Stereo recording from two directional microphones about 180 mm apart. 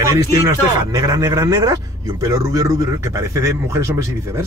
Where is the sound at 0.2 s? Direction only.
15° right (ahead or behind).